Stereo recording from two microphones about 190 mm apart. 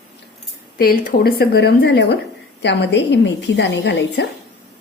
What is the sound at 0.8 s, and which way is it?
Speech, 50° left (ahead or behind).